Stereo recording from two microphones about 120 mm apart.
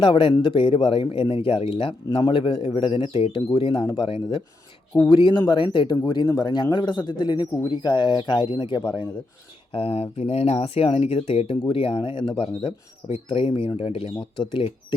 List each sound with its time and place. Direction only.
0.0 s speech: 45° left (ahead or behind)
6.0 s speech: 25° left (ahead or behind)
9.7 s speech: 50° left (ahead or behind)